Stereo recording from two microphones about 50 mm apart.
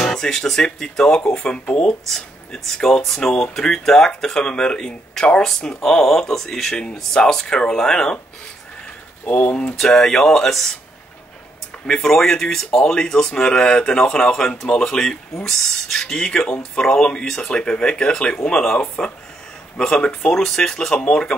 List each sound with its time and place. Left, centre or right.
0.0 s speech: centre
2.0 s speech: centre
9.2 s speech: left
9.9 s speech: centre
12.0 s speech: centre